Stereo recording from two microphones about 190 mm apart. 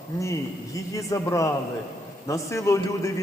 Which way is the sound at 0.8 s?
15° left (ahead or behind).